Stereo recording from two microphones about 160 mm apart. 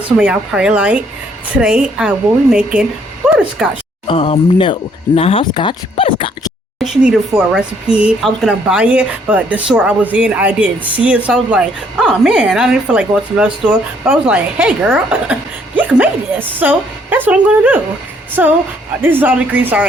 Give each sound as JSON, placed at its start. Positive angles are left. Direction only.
{"t": 0.2, "sound": "speech", "side_deg": -5}
{"t": 4.0, "sound": "speech", "side_deg": 35}
{"t": 6.8, "sound": "speech", "side_deg": 0}